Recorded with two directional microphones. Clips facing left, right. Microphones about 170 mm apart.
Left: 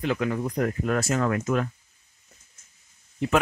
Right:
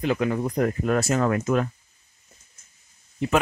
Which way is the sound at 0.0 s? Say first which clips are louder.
Right 2 dB; 20° right (ahead or behind).